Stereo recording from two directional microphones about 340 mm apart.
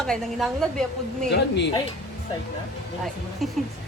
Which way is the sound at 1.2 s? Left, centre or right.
Left.